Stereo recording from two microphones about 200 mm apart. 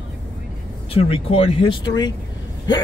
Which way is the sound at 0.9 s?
30° left (ahead or behind).